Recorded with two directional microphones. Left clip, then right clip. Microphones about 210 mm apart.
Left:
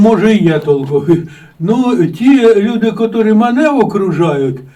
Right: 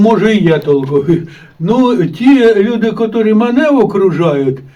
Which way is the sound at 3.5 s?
Centre (ahead or behind).